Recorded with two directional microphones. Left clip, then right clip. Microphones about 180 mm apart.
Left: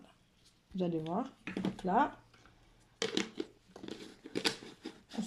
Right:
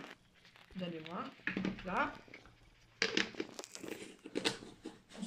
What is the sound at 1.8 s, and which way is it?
Speech, 60° left (ahead or behind).